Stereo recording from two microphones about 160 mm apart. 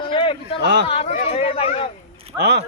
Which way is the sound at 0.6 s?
90° right.